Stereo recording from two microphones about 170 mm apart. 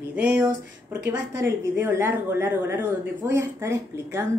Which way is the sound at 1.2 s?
90° right.